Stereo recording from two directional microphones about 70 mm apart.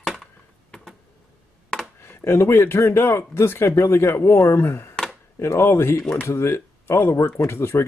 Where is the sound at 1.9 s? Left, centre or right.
Left.